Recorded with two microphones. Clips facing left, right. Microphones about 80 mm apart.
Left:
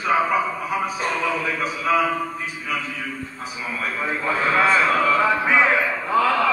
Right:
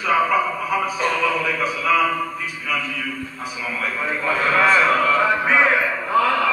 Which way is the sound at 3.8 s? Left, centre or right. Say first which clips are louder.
Right 1 dB; centre.